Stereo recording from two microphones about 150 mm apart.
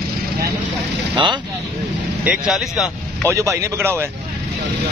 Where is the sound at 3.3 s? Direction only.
20° right (ahead or behind).